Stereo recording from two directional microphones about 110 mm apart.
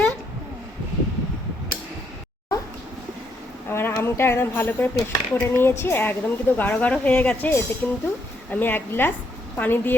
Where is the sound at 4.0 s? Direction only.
20° left (ahead or behind).